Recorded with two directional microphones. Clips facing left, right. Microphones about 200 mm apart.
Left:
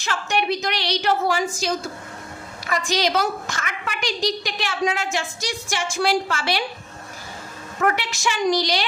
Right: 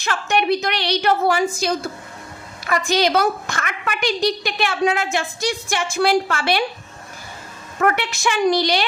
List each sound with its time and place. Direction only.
0.0 s a woman's voice: 60° right (ahead or behind)
7.9 s a woman's voice: 60° right (ahead or behind)